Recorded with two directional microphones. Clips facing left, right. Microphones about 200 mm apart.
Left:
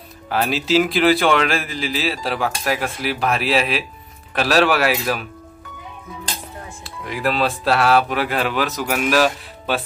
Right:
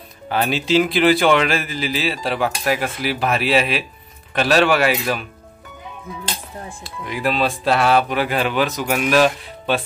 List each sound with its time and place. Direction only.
0.3 s a man's voice: centre (ahead or behind)
6.8 s a man's voice: centre (ahead or behind)